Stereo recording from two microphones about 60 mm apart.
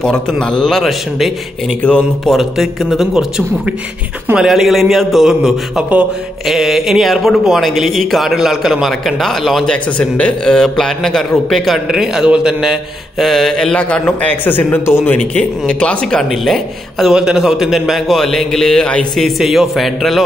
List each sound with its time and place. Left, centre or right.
0.0 s a man's voice: centre
1.8 s speech: left
2.2 s a man's voice: centre
9.7 s a man's voice: left; by 12.7 s centre
13.2 s a man's voice: centre
13.7 s speech: left; by 17.1 s centre
17.1 s a man's voice: centre